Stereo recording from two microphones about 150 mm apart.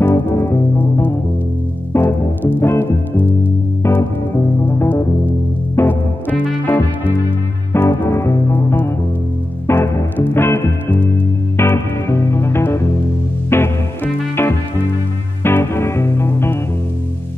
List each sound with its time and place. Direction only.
0.0 s music: 15° left (ahead or behind)
4.6 s music: 15° left (ahead or behind)
7.7 s music: 15° left (ahead or behind)